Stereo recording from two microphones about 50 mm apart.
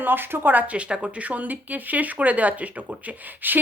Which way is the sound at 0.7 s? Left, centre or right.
Right.